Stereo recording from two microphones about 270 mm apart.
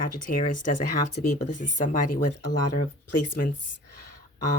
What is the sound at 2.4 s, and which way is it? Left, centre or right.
Speech, left.